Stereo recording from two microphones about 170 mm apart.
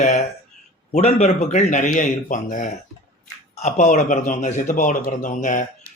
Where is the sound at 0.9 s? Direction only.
40° left (ahead or behind).